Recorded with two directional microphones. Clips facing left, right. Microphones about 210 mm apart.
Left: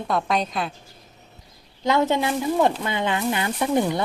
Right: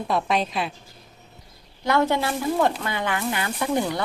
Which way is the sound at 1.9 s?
20° left (ahead or behind).